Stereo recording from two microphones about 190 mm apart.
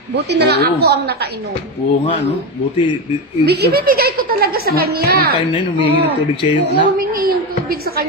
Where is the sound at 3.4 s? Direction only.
60° right (ahead or behind).